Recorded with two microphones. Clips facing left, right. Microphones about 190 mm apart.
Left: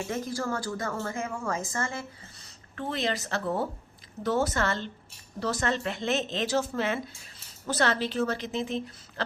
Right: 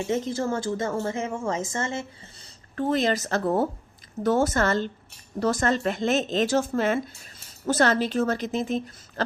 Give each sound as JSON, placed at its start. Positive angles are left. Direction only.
{"t": 0.0, "sound": "speech", "side_deg": -20}
{"t": 2.7, "sound": "a woman's voice", "side_deg": -40}